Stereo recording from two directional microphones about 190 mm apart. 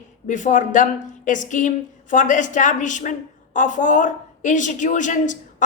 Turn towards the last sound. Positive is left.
turn(degrees=40)  # may be behind; listen again after turning